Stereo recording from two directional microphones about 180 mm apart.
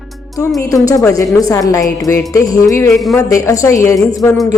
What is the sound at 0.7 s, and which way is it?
A woman's voice, 20° left (ahead or behind).